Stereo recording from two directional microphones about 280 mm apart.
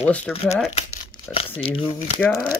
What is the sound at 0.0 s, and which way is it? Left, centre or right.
Speech, centre.